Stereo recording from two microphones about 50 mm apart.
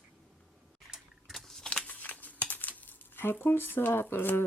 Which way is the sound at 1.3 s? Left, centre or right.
Centre.